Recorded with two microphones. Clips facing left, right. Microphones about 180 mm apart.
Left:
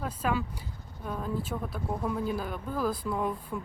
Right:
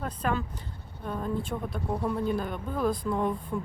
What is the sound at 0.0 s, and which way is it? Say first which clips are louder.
A woman's voice: even; 5° left (ahead or behind).